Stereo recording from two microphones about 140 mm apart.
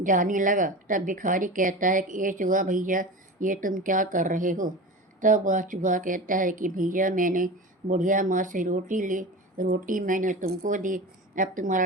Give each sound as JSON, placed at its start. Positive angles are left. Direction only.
{"t": 0.0, "sound": "speech", "side_deg": -70}
{"t": 10.6, "sound": "speech", "side_deg": -65}